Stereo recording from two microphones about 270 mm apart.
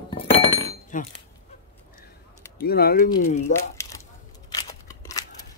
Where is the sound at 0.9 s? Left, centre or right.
Left.